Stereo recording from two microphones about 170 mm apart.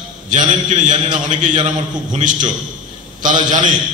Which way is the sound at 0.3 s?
45° right (ahead or behind).